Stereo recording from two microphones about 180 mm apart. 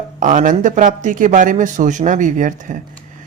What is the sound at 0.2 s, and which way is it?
A woman's voice, 45° right (ahead or behind).